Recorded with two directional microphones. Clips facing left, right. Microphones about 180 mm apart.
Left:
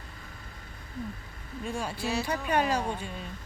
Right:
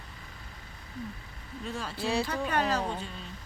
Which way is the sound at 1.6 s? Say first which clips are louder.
Left 3 dB; 10° left (ahead or behind).